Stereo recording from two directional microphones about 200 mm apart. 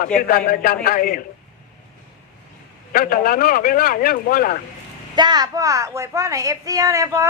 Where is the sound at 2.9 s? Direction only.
45° left (ahead or behind).